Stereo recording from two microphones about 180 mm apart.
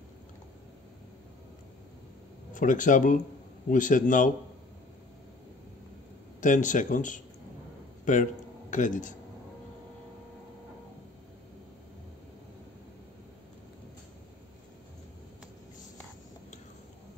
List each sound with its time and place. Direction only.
2.5 s speech: 45° left (ahead or behind)
6.4 s a man's voice: 45° left (ahead or behind)